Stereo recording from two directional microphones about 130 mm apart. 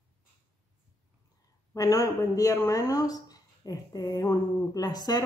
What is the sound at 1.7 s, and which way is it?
Speech, 25° left (ahead or behind).